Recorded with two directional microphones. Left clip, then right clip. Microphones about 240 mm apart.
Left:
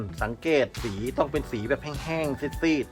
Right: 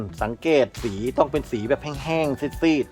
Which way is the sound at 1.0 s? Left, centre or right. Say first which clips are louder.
Right 5 dB; right.